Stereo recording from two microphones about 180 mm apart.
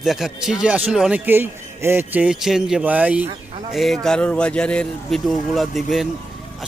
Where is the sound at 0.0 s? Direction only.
Centre (ahead or behind).